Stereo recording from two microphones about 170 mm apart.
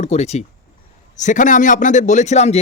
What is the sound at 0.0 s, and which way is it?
Speech, 40° left (ahead or behind).